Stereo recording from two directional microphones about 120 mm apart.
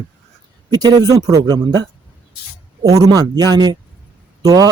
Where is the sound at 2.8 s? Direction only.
30° right (ahead or behind).